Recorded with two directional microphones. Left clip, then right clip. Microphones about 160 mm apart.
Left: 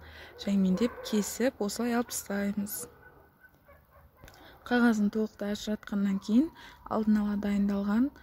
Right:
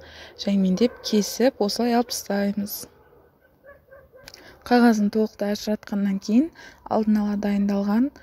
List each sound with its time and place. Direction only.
0.0 s speech: 30° right (ahead or behind)
4.3 s a sound: 40° right (ahead or behind)
5.1 s speech: 25° right (ahead or behind)